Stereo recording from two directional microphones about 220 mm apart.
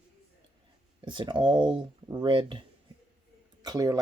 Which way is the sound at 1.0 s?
20° right (ahead or behind).